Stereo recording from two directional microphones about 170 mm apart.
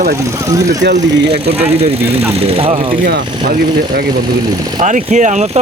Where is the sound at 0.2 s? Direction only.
20° right (ahead or behind).